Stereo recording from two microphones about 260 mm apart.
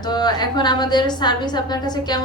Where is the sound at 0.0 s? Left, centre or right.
Centre.